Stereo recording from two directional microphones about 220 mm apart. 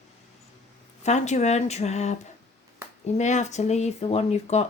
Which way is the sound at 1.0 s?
30° left (ahead or behind).